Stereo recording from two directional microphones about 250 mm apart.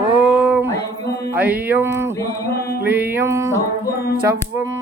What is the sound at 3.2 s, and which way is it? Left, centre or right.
Speech, centre.